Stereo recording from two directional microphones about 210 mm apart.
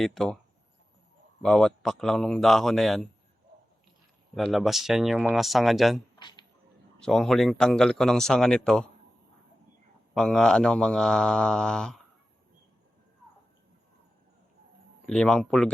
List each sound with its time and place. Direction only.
0.0 s speech: centre (ahead or behind)
1.4 s speech: centre (ahead or behind)
4.4 s speech: centre (ahead or behind)
6.1 s a sound: 20° left (ahead or behind)
7.0 s speech: centre (ahead or behind)
10.2 s speech: 5° left (ahead or behind)
15.0 s speech: 5° left (ahead or behind)